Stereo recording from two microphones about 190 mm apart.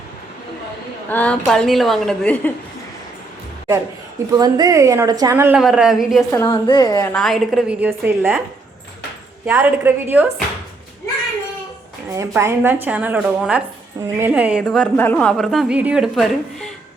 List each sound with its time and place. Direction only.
1.1 s a woman's voice: 5° left (ahead or behind)
4.4 s a woman's voice: 20° right (ahead or behind); by 6.2 s centre (ahead or behind)
6.3 s a woman's voice: 20° left (ahead or behind)
7.1 s a woman's voice: centre (ahead or behind)
9.5 s a woman's voice: 10° right (ahead or behind)
12.1 s a woman's voice: 15° right (ahead or behind)
14.6 s a woman's voice: 5° left (ahead or behind)